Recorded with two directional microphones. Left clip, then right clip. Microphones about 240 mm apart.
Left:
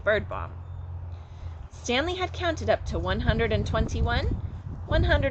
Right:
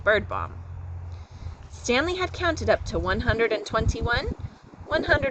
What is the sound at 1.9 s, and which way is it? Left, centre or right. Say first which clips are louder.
A woman's voice: right 3 dB; right.